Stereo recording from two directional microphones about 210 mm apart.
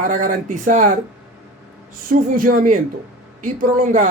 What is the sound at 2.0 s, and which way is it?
Speech, 40° right (ahead or behind).